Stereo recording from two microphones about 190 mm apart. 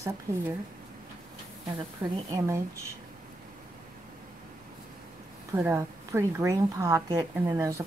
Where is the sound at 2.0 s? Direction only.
20° right (ahead or behind).